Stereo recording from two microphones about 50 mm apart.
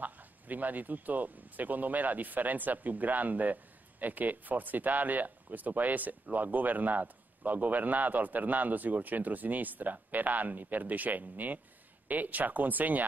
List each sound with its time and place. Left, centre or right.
0.0 s a man's voice: right